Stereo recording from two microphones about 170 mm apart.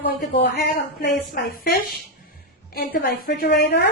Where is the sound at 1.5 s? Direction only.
65° left (ahead or behind).